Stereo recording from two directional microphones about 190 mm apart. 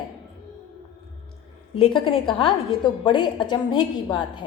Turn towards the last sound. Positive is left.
turn(degrees=25)  # may be behind; listen again after turning